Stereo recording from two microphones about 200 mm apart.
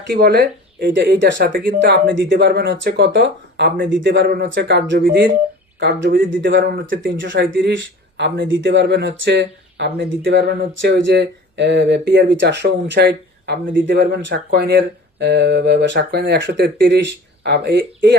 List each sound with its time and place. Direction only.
0.1 s speech: 50° right (ahead or behind)